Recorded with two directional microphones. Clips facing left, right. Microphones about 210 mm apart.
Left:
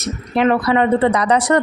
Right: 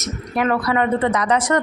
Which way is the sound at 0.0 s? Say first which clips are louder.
Left 5 dB; 25° left (ahead or behind).